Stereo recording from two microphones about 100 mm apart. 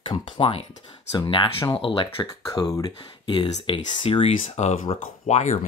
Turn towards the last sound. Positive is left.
turn(degrees=90)